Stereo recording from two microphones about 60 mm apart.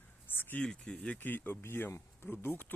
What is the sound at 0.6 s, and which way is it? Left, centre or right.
Speech, centre.